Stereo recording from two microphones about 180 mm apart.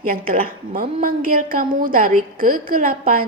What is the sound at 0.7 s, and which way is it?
A woman's voice, 50° right (ahead or behind).